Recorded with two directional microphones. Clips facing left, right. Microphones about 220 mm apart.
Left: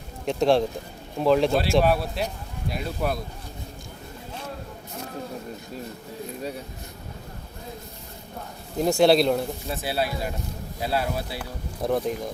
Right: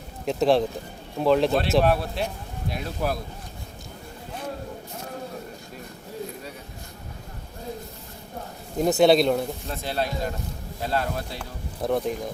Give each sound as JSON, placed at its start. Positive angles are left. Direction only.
{"t": 0.3, "sound": "speech", "side_deg": 0}
{"t": 8.8, "sound": "speech", "side_deg": 0}